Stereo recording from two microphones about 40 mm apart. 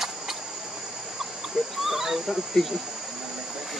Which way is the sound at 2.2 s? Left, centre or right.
Centre.